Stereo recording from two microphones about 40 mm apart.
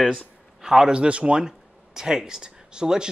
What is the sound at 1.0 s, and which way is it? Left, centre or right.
Speech, right.